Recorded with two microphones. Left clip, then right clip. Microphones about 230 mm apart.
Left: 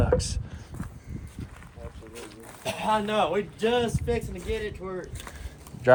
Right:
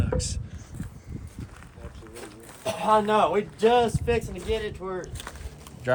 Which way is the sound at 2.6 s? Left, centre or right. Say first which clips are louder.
Right 4 dB; right.